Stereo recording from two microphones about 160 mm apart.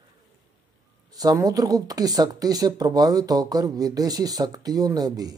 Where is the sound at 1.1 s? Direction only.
25° right (ahead or behind).